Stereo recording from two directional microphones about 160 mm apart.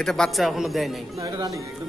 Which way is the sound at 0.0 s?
Centre (ahead or behind).